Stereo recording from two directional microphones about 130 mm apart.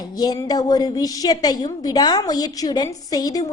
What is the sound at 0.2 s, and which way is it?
A woman's voice, 30° left (ahead or behind).